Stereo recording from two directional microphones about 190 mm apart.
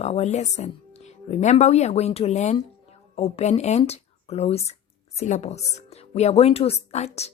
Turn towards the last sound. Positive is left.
turn(degrees=35)  # may be behind; listen again after turning